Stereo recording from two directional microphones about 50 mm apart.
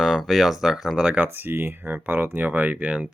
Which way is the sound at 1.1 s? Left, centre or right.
Right.